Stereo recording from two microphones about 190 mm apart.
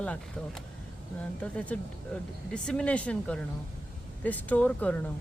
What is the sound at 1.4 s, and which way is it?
Speech, 5° left (ahead or behind).